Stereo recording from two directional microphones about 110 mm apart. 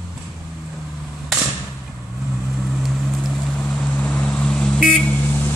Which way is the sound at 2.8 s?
Centre (ahead or behind).